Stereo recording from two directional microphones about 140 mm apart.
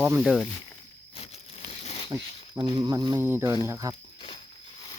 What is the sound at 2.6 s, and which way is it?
Speech, 30° right (ahead or behind).